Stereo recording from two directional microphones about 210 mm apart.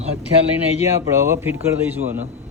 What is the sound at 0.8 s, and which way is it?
A man's voice, 10° right (ahead or behind).